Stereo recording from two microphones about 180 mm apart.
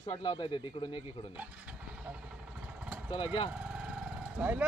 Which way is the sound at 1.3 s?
10° right (ahead or behind).